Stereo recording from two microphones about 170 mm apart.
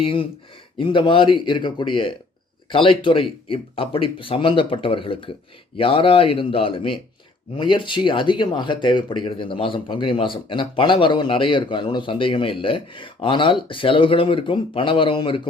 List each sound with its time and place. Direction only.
0.0 s speech: 30° left (ahead or behind)